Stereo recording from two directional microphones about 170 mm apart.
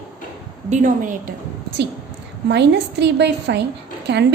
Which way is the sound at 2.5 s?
85° right.